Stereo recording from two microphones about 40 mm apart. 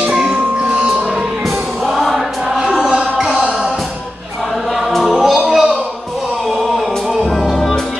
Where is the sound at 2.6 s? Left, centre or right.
Centre.